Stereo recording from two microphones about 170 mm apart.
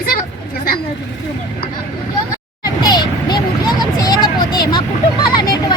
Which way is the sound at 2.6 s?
25° left (ahead or behind).